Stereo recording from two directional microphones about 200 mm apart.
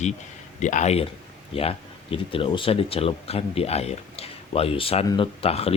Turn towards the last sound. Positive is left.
turn(degrees=30)  # may be behind; listen again after turning